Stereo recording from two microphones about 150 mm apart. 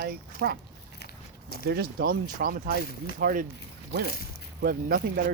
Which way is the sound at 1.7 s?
85° right.